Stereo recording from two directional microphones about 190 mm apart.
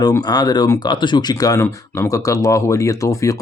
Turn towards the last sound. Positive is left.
turn(degrees=15)  # may be behind; listen again after turning